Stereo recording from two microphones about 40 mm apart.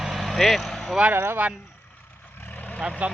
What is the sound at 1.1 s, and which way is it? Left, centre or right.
Speech, right.